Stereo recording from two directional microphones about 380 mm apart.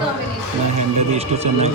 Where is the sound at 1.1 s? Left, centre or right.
Centre.